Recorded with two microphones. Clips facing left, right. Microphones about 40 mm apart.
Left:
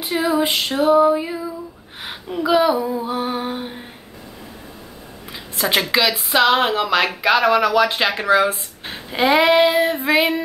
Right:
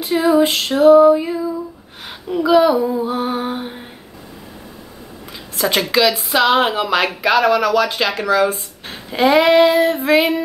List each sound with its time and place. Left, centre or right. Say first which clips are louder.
0.0 s female singing: right 5 dB; centre
2.3 s a woman's voice: right 4 dB; centre
5.6 s a woman's voice: right 2 dB; centre
7.2 s female singing: right 1 dB; centre
8.5 s female singing: right 1 dB; centre